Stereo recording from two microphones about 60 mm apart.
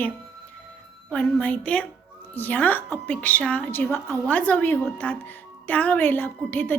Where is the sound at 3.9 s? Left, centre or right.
Left.